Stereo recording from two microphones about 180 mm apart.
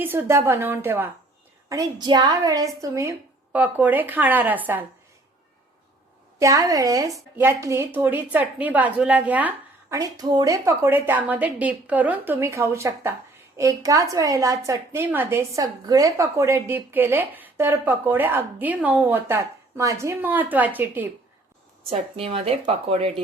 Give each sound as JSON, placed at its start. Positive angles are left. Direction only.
{"t": 0.0, "sound": "a woman's voice", "side_deg": -10}
{"t": 1.7, "sound": "a woman's voice", "side_deg": -25}
{"t": 6.4, "sound": "a woman's voice", "side_deg": -20}
{"t": 10.0, "sound": "a woman's voice", "side_deg": -20}
{"t": 21.8, "sound": "speech", "side_deg": -35}